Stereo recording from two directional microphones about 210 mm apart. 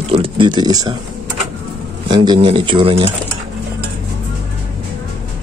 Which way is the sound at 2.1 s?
25° right (ahead or behind).